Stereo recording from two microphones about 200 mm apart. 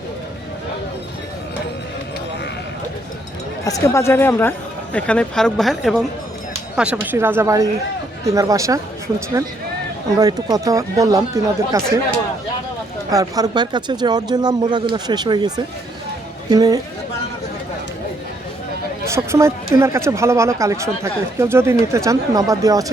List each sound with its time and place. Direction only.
3.6 s speech: 15° left (ahead or behind); by 11.8 s 15° right (ahead or behind)
13.1 s speech: 15° right (ahead or behind)
19.0 s speech: 15° right (ahead or behind)